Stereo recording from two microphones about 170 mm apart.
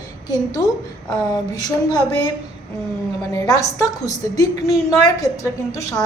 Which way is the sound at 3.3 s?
20° left (ahead or behind).